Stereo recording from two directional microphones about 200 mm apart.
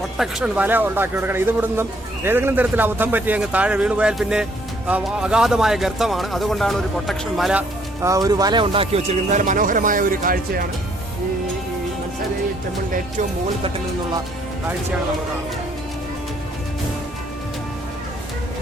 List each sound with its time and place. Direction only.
0.2 s speech: 5° right (ahead or behind)
8.0 s speech: 15° right (ahead or behind); by 10.7 s 45° right (ahead or behind)